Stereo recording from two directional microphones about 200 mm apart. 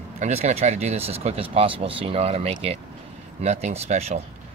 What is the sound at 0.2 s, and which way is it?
Speech, 35° right (ahead or behind).